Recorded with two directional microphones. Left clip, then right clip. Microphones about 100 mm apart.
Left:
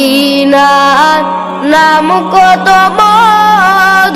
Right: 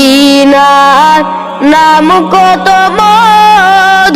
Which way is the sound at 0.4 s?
90° right.